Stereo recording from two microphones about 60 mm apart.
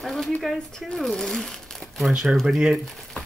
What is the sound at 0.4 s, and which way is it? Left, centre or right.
Speech, centre.